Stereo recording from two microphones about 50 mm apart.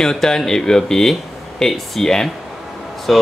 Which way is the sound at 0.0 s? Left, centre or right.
Centre.